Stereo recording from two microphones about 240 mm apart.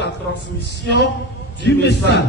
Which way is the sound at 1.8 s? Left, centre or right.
Left.